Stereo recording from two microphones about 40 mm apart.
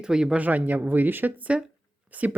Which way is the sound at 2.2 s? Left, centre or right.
Right.